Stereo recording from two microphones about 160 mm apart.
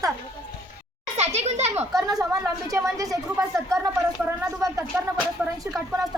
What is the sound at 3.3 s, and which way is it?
Speech, 5° right (ahead or behind).